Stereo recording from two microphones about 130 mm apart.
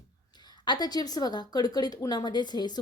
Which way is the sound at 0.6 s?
35° left (ahead or behind).